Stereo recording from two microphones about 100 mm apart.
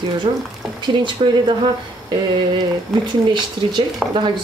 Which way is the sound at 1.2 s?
60° right (ahead or behind).